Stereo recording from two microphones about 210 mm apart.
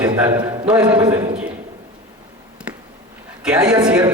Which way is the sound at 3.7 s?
20° right (ahead or behind).